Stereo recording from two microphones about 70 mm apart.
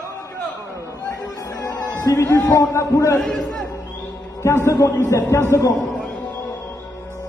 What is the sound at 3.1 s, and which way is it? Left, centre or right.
Speech, centre.